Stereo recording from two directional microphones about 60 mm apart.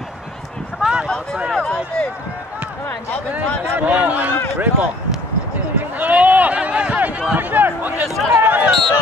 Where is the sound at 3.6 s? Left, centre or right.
Right.